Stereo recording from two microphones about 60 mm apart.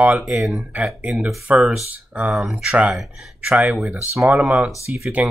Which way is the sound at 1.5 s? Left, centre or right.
Right.